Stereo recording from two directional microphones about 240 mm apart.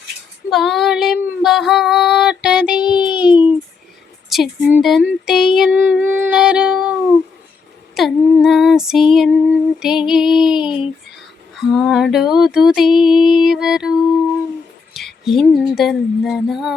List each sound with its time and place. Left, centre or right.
0.5 s child singing: centre
3.2 s a sound: centre
4.3 s speech: centre
7.9 s speech: centre
14.9 s speech: centre